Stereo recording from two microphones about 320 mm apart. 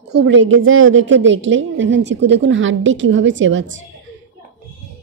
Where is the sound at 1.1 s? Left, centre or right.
Right.